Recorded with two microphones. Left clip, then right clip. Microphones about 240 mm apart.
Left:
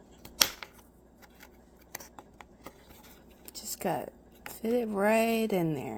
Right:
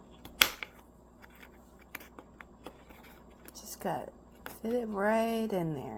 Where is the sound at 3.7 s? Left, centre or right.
Left.